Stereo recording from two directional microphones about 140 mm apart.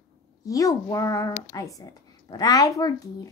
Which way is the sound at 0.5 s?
25° left (ahead or behind).